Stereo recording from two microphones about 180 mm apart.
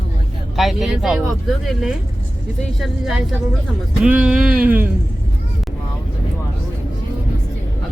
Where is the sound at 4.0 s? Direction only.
5° right (ahead or behind).